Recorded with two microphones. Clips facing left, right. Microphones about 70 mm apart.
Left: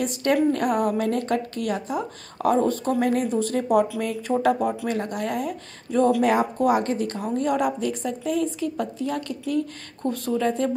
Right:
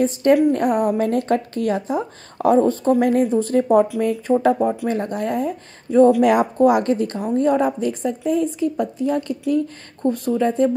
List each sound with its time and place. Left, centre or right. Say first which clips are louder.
0.0 s speech: right 6 dB; right
1.0 s speech: right 4 dB; right